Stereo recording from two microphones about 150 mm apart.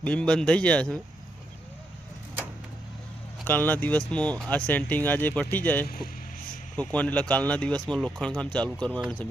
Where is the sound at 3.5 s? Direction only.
10° left (ahead or behind).